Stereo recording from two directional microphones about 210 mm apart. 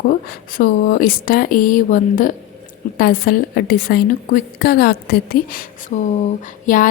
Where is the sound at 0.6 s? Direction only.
40° left (ahead or behind).